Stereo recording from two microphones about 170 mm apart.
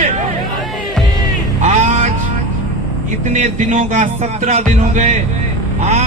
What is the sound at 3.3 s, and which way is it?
Speech, 45° right (ahead or behind).